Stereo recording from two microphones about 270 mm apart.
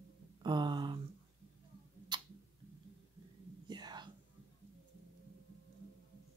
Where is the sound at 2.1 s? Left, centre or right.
Centre.